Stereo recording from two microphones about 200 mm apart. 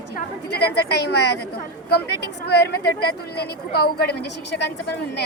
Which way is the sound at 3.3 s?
50° left (ahead or behind).